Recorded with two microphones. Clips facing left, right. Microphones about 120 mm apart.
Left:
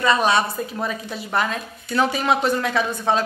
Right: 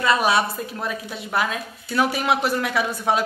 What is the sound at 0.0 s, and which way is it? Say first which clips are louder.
A woman's voice: left 1 dB; 5° right (ahead or behind).